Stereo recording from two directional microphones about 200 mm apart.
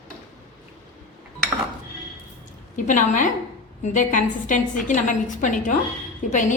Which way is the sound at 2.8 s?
40° left (ahead or behind).